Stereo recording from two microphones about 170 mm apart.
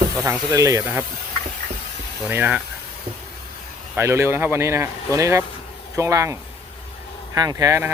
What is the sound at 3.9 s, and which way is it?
Speech, 15° right (ahead or behind).